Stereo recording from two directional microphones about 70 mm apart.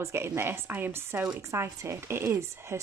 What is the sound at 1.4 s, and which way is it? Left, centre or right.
Speech, right.